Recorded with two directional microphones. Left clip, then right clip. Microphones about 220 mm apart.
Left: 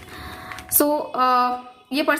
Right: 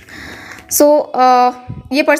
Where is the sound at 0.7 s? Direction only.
30° right (ahead or behind).